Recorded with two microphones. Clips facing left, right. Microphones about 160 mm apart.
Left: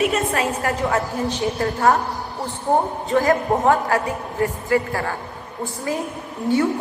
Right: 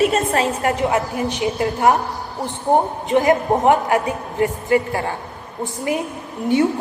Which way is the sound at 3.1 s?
20° right (ahead or behind).